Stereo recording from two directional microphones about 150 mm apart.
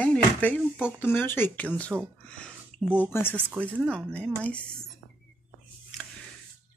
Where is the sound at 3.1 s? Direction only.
15° left (ahead or behind).